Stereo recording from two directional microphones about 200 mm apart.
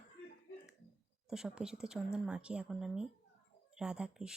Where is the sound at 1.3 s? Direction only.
5° right (ahead or behind).